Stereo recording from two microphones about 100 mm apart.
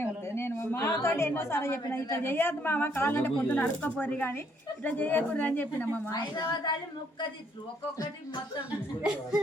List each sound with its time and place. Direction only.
0.0 s a woman's voice: 25° left (ahead or behind)
6.1 s a woman's voice: 45° left (ahead or behind)